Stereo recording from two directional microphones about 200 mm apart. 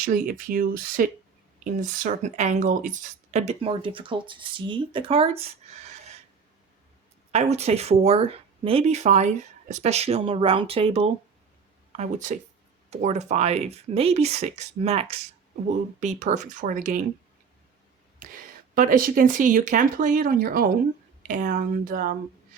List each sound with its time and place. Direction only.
0.0 s speech: 45° right (ahead or behind)
7.3 s speech: 35° right (ahead or behind)
18.2 s speech: 45° right (ahead or behind)